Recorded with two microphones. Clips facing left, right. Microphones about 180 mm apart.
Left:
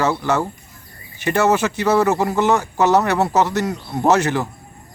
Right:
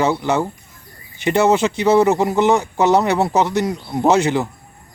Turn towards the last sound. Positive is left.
turn(degrees=-20)  # may be behind; listen again after turning